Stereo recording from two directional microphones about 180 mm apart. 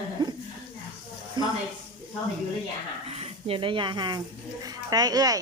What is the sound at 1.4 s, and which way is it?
Speech, 25° right (ahead or behind).